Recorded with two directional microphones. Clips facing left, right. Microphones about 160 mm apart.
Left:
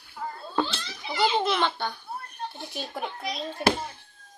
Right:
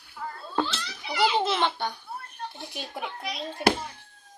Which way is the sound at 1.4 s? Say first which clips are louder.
Even; 25° right (ahead or behind).